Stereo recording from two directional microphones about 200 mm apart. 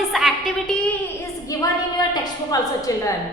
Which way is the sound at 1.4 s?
20° left (ahead or behind).